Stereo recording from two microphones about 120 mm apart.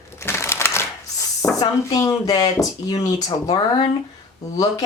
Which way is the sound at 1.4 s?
30° left (ahead or behind).